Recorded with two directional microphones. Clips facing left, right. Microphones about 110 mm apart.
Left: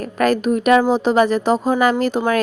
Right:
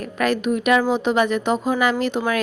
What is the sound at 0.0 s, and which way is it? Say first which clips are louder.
A woman's voice: left 4 dB; 40° left (ahead or behind).